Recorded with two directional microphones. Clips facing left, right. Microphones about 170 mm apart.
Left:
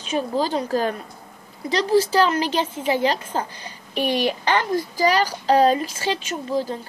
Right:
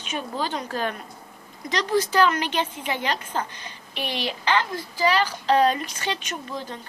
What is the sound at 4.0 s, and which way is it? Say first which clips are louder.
A woman's voice: left 8 dB; 45° left (ahead or behind).